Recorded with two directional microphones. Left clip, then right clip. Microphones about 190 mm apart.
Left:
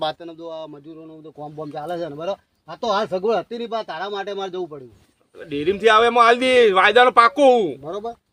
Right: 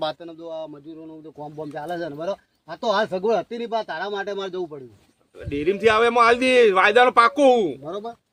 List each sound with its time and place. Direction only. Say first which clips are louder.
0.0 s a man's voice: left 2 dB; 10° left (ahead or behind)
7.9 s speech: left 3 dB; 10° left (ahead or behind)